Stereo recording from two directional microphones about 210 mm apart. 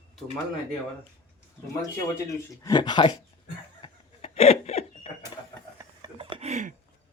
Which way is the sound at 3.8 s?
30° left (ahead or behind).